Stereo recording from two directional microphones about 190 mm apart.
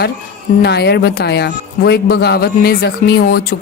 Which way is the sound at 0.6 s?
60° left (ahead or behind).